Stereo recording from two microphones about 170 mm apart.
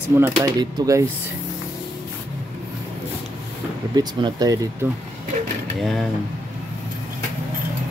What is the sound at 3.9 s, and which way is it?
Speech, 25° right (ahead or behind).